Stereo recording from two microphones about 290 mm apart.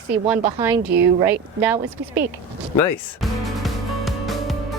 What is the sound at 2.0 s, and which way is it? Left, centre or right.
Speech, right.